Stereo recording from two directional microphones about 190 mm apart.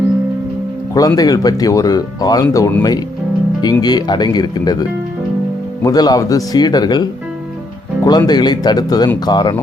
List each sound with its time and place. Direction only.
0.9 s speech: 20° left (ahead or behind)